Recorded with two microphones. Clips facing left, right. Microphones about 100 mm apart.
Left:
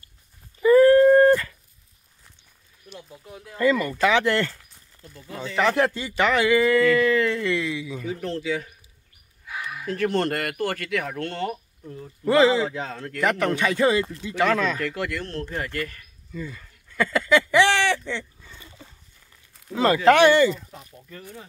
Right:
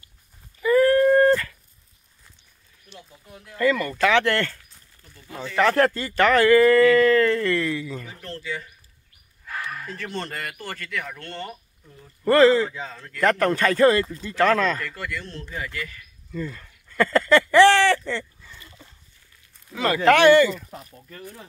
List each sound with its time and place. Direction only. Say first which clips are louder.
0.6 s dog: left 4 dB; 25° left (ahead or behind)
2.9 s speech: left 4 dB; 15° left (ahead or behind)
5.6 s speech: right 2 dB; 10° left (ahead or behind)
8.3 s speech: left 4 dB; 85° left
9.5 s a sound: left 1 dB; 10° left (ahead or behind)
9.9 s speech: left 12 dB; 60° left (ahead or behind)
12.3 s speech: right 2 dB; 10° left (ahead or behind)
12.6 s speech: left 4 dB; 60° left (ahead or behind)
13.2 s speech: right 2 dB; 10° left (ahead or behind)
14.9 s speech: left 4 dB; 60° left (ahead or behind)
16.3 s a sound: right 3 dB; centre (ahead or behind)
19.7 s speech: left 1 dB; 25° left (ahead or behind)